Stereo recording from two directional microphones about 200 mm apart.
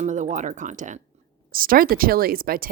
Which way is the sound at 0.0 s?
35° right (ahead or behind).